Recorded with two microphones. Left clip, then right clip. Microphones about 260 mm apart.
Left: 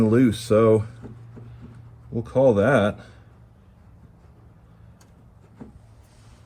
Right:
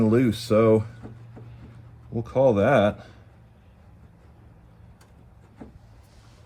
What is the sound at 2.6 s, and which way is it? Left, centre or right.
Speech, left.